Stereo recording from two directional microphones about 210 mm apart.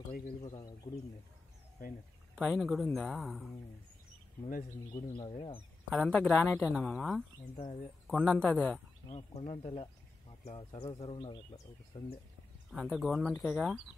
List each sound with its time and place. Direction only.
0.4 s speech: 20° left (ahead or behind)
2.3 s a woman's voice: centre (ahead or behind)
4.9 s speech: 20° left (ahead or behind)
5.9 s a woman's voice: 5° left (ahead or behind)
7.5 s speech: 30° left (ahead or behind)
8.1 s a woman's voice: 5° left (ahead or behind)
9.1 s speech: 30° left (ahead or behind)
12.7 s a woman's voice: 5° right (ahead or behind)